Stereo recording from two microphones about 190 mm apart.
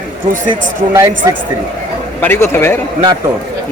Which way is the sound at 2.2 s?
10° left (ahead or behind).